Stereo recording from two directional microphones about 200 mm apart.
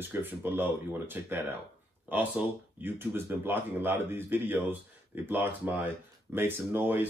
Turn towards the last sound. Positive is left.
turn(degrees=-10)  # may be behind; listen again after turning